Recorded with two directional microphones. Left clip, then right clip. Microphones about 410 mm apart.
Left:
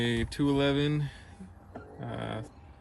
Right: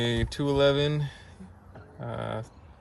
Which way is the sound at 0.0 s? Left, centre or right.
Right.